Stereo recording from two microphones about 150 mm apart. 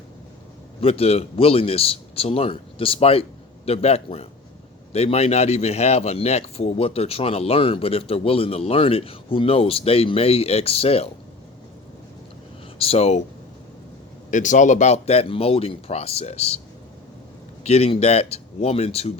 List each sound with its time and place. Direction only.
0.8 s a man's voice: 40° left (ahead or behind)
12.8 s speech: 45° left (ahead or behind)
14.3 s speech: 55° left (ahead or behind)
17.6 s speech: 45° left (ahead or behind)